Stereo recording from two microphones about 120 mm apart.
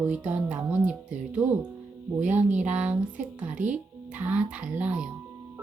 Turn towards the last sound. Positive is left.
turn(degrees=-10)  # may be behind; listen again after turning